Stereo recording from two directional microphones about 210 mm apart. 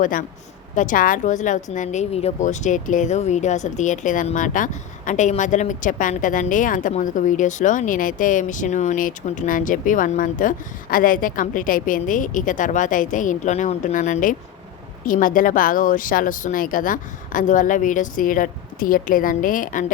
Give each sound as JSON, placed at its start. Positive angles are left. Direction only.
{"t": 0.0, "sound": "speech", "side_deg": 40}